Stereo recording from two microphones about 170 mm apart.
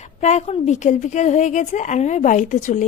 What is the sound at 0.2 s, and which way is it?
A woman's voice, 40° left (ahead or behind).